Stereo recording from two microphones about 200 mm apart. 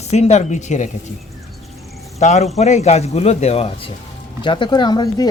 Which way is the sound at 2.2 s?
35° left (ahead or behind).